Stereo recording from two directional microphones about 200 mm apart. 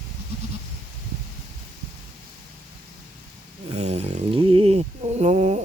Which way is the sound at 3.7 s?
35° right (ahead or behind).